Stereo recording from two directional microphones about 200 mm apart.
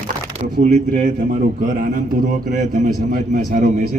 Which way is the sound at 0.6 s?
40° right (ahead or behind).